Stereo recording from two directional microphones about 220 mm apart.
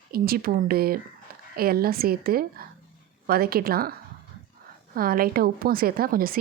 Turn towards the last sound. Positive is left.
turn(degrees=-40)  # may be behind; listen again after turning